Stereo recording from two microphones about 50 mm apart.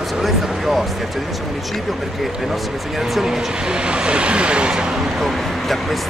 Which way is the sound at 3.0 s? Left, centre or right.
Centre.